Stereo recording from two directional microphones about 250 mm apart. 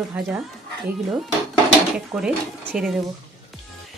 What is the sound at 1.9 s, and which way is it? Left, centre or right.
Speech, centre.